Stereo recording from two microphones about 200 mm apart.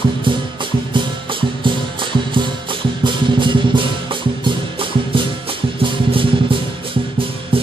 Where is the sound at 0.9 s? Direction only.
25° right (ahead or behind).